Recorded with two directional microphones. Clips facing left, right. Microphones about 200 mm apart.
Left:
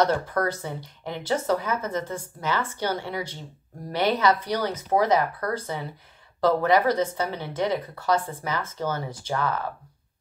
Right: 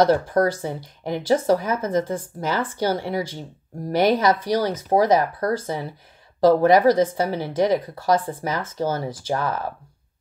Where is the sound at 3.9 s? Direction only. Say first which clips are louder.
Right 4 dB; 45° right (ahead or behind).